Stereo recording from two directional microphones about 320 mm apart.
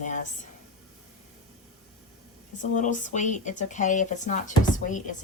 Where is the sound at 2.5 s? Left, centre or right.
Left.